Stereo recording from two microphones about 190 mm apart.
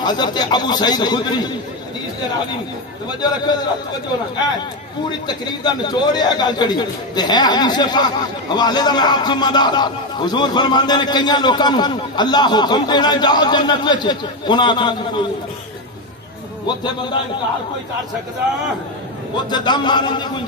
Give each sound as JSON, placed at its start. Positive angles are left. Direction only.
{"t": 0.0, "sound": "a man's voice", "side_deg": 20}
{"t": 3.2, "sound": "a man's voice", "side_deg": 20}
{"t": 5.2, "sound": "a man's voice", "side_deg": 20}
{"t": 19.3, "sound": "a man's voice", "side_deg": 25}